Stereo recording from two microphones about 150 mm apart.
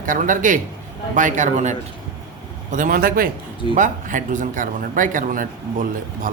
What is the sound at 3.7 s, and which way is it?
Speech, 60° right (ahead or behind).